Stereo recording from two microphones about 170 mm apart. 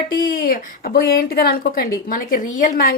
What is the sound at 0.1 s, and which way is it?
A woman's voice, 60° left (ahead or behind).